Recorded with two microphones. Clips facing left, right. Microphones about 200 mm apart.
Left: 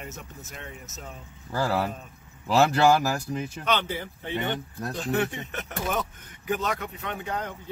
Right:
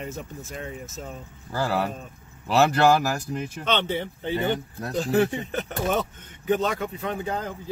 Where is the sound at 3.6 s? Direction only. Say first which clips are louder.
Right 3 dB; 25° right (ahead or behind).